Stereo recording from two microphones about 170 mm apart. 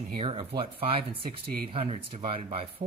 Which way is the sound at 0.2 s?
35° right (ahead or behind).